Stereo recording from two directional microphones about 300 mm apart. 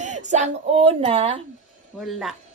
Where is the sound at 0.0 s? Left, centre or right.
Right.